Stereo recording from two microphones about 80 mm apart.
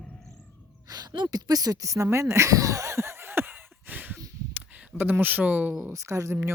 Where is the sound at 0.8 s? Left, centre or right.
Right.